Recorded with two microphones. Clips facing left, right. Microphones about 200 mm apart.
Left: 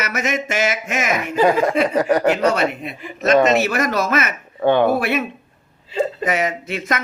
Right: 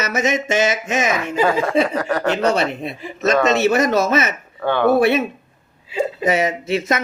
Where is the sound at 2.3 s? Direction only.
30° right (ahead or behind).